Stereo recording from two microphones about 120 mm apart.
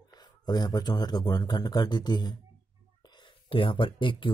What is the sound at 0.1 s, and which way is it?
Speech, 35° left (ahead or behind).